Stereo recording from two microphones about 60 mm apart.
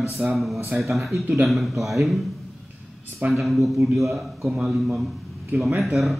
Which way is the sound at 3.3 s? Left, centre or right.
Centre.